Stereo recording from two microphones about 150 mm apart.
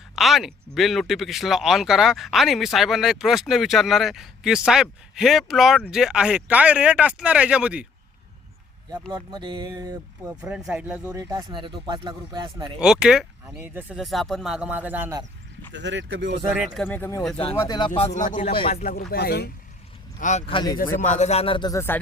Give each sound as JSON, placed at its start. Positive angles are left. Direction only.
{"t": 0.2, "sound": "speech", "side_deg": 0}
{"t": 9.1, "sound": "speech", "side_deg": -30}
{"t": 10.4, "sound": "speech", "side_deg": -5}
{"t": 11.1, "sound": "speech", "side_deg": -20}
{"t": 12.8, "sound": "speech", "side_deg": -5}
{"t": 14.0, "sound": "speech", "side_deg": 0}
{"t": 16.7, "sound": "speech", "side_deg": 10}
{"t": 17.7, "sound": "speech", "side_deg": 35}
{"t": 18.5, "sound": "speech", "side_deg": 35}
{"t": 18.8, "sound": "speech", "side_deg": 75}
{"t": 20.1, "sound": "speech", "side_deg": 55}
{"t": 20.5, "sound": "speech", "side_deg": 30}
{"t": 21.0, "sound": "speech", "side_deg": 55}
{"t": 21.7, "sound": "speech", "side_deg": 15}